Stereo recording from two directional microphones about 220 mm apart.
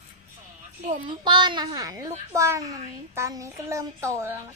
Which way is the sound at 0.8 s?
35° right (ahead or behind).